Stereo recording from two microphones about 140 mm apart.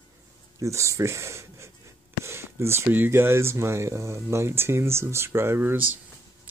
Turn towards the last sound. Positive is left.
turn(degrees=-15)  # may be behind; listen again after turning